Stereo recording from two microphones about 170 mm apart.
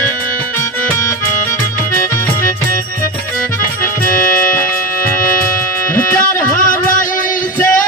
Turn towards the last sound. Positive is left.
turn(degrees=50)  # may be behind; listen again after turning